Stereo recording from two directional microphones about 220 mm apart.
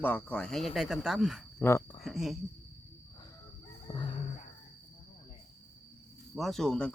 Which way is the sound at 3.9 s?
20° left (ahead or behind).